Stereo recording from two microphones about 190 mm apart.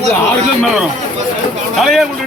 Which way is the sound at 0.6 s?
Centre (ahead or behind).